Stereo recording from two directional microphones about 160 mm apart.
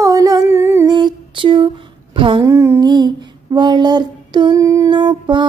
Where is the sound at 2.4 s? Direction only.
20° right (ahead or behind).